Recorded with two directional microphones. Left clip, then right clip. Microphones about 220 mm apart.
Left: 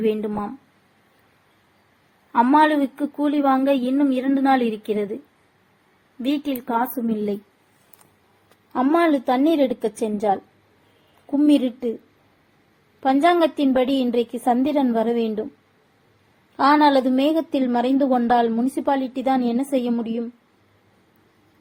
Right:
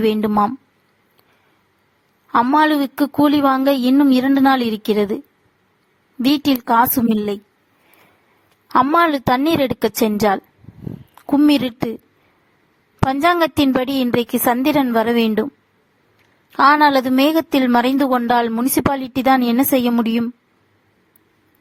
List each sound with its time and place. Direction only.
0.0 s a woman's voice: 60° right (ahead or behind)
2.3 s a woman's voice: 60° right (ahead or behind)
6.3 s a woman's voice: 55° right (ahead or behind)
8.7 s a woman's voice: 55° right (ahead or behind)
13.1 s a woman's voice: 55° right (ahead or behind)
16.6 s a woman's voice: 55° right (ahead or behind)